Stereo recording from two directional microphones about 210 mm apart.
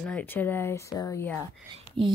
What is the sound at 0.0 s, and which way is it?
Speech, 10° left (ahead or behind).